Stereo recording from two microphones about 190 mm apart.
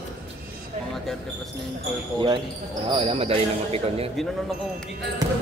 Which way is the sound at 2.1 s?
25° right (ahead or behind).